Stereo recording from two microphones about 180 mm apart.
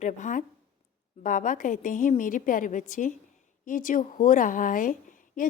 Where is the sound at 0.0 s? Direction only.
45° left (ahead or behind).